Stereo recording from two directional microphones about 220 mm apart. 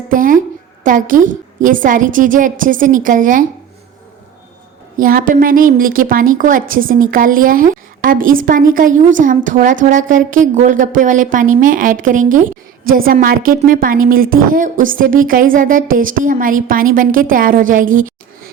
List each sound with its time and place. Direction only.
0.1 s a sound: 40° right (ahead or behind)
0.9 s a woman's voice: 35° right (ahead or behind)
4.9 s a woman's voice: 40° right (ahead or behind)